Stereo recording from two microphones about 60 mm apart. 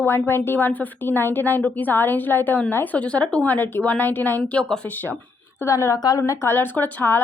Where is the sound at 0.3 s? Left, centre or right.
Left; by 3.4 s centre.